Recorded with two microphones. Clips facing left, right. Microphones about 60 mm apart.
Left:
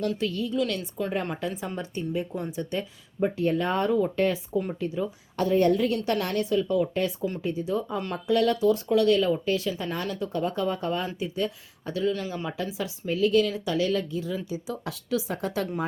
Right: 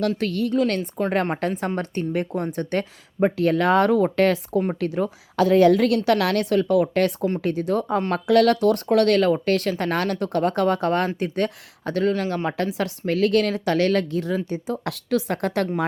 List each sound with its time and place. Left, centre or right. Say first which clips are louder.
0.2 s speech: right 5 dB; right
0.7 s a woman's voice: right 6 dB; right